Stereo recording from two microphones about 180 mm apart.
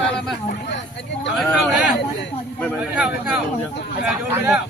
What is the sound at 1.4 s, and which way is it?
Speech, centre (ahead or behind).